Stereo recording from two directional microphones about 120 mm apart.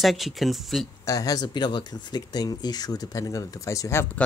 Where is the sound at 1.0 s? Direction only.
30° left (ahead or behind).